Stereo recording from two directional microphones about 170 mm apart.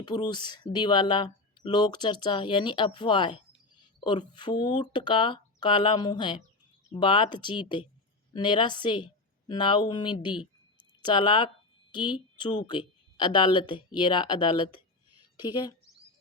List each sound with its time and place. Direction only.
0.0 s speech: 25° left (ahead or behind)